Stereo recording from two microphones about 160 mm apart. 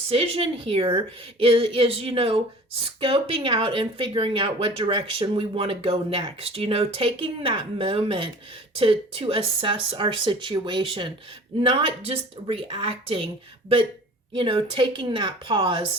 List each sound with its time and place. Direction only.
0.1 s speech: 40° right (ahead or behind)
14.3 s speech: 35° right (ahead or behind)